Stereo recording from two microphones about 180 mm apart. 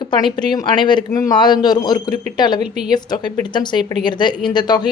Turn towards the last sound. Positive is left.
turn(degrees=25)  # may be behind; listen again after turning